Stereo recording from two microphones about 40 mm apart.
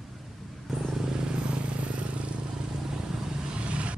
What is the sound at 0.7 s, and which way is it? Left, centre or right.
Vehicle, centre.